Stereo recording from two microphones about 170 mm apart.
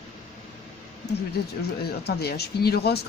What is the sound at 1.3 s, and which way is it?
Speech, 70° left (ahead or behind).